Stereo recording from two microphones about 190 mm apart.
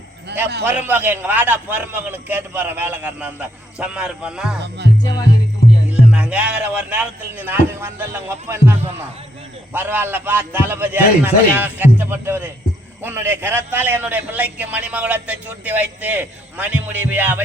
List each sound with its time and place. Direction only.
0.6 s a man's voice: 10° right (ahead or behind)
4.8 s music: 65° right (ahead or behind)
5.9 s a man's voice: 5° right (ahead or behind)
9.7 s a man's voice: 10° right (ahead or behind)